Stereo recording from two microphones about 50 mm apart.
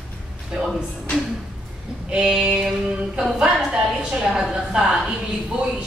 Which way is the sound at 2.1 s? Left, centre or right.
Centre.